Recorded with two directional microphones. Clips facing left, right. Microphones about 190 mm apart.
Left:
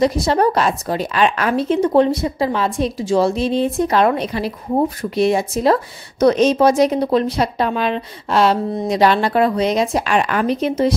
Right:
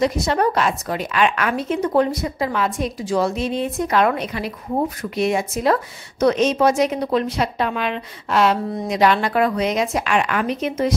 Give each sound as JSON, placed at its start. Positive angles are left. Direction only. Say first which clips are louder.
{"t": 0.0, "sound": "speech", "louder": "left 3 dB", "side_deg": 35}